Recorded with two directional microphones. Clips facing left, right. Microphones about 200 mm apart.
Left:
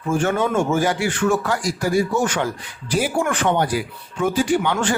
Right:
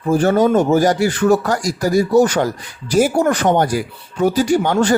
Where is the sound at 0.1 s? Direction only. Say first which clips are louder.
Right 6 dB; 35° right (ahead or behind).